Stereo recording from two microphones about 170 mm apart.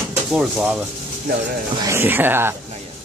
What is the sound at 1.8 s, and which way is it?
Speech, 15° right (ahead or behind).